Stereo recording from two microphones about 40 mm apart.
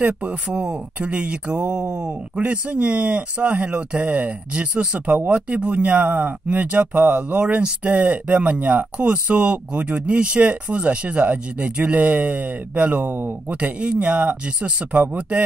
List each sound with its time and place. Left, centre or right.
0.2 s speech: right
1.7 s speech: right
2.4 s speech: right
8.9 s speech: right
13.0 s speech: right
13.5 s speech: right